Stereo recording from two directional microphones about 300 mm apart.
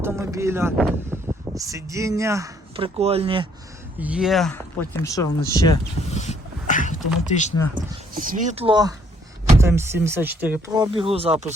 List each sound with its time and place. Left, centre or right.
0.0 s a sound: centre
0.8 s speech: centre
4.0 s speech: centre
6.1 s dog: left
7.8 s speech: right; by 10.8 s centre
10.9 s speech: centre